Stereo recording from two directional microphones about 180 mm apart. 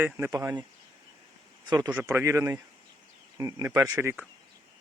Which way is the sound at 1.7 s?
20° right (ahead or behind).